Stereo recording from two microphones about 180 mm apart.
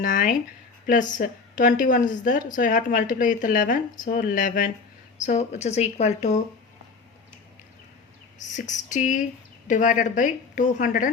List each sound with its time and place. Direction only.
0.0 s speech: 45° left (ahead or behind)
8.4 s speech: 45° left (ahead or behind)